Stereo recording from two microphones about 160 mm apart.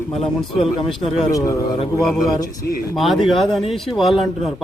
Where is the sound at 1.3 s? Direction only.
20° left (ahead or behind).